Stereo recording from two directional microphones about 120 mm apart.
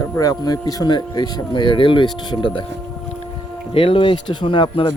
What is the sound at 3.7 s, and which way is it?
Speech, 50° left (ahead or behind).